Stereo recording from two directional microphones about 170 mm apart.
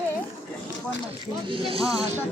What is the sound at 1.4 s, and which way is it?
Speech, 30° right (ahead or behind).